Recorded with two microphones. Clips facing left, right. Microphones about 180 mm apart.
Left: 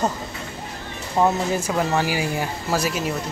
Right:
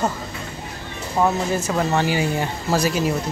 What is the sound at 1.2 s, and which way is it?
Speech, 10° left (ahead or behind).